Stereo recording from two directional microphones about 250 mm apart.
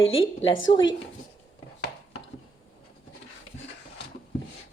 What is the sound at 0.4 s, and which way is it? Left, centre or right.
Speech, left.